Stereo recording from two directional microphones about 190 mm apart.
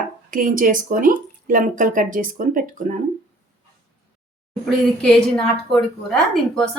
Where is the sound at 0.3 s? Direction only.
45° right (ahead or behind).